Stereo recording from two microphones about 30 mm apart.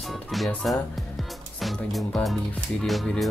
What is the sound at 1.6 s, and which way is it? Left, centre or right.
Music, centre.